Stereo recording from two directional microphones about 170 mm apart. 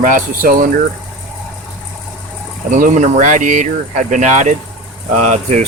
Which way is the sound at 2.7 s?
50° right (ahead or behind).